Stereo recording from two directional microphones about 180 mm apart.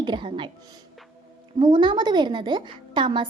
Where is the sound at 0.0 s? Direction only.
25° right (ahead or behind).